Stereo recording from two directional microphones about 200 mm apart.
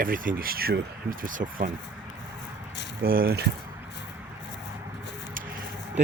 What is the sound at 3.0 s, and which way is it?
Speech, 45° right (ahead or behind).